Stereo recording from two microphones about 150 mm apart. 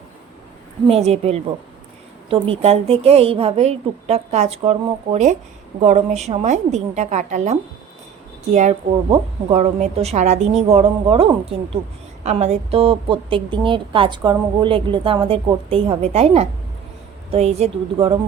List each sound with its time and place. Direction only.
0.9 s a woman's voice: 45° right (ahead or behind)